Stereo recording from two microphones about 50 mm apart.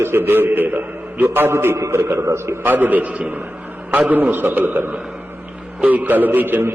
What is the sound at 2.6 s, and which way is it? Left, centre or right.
A man's voice, right.